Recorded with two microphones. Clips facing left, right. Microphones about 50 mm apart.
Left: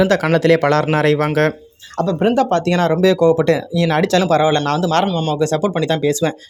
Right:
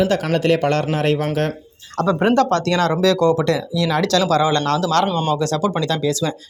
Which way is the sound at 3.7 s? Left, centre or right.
Left.